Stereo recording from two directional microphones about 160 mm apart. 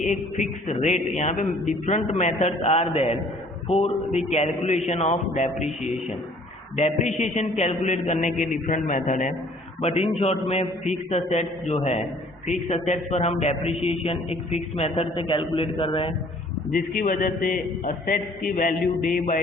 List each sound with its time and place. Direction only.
0.0 s a man's voice: 50° left (ahead or behind)
9.8 s a man's voice: 40° left (ahead or behind)
16.7 s a man's voice: 60° left (ahead or behind)